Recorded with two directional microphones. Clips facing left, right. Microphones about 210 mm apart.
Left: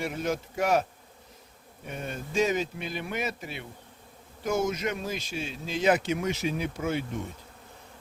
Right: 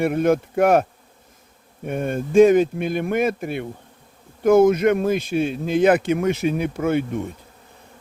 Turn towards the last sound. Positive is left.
turn(degrees=-55)  # may be behind; listen again after turning